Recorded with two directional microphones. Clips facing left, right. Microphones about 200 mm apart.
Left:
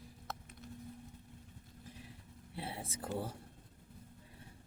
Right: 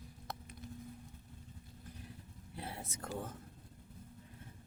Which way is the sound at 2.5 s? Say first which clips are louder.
Left 2 dB; 30° left (ahead or behind).